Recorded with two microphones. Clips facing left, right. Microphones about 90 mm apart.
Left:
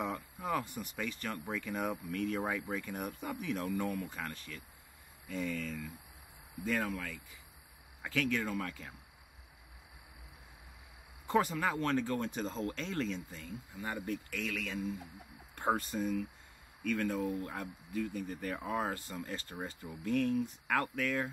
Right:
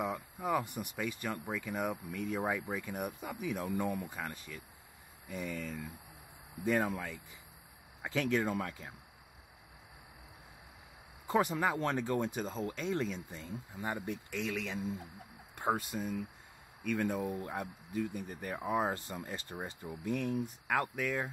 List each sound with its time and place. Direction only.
0.0 s speech: 10° right (ahead or behind)
11.2 s speech: 15° right (ahead or behind)
13.3 s speech: 30° right (ahead or behind)
15.5 s speech: 5° right (ahead or behind)
18.9 s speech: 30° right (ahead or behind)
19.2 s speech: 15° right (ahead or behind)